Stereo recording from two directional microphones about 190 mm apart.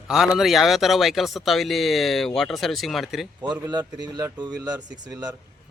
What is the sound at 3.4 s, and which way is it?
A man's voice, 20° right (ahead or behind).